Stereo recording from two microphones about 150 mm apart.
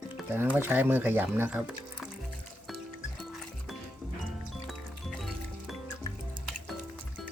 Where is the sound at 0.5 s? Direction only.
10° right (ahead or behind).